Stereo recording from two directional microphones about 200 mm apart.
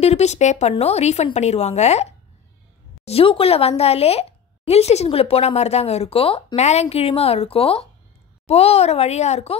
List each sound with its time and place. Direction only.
0.0 s a woman's voice: 35° left (ahead or behind)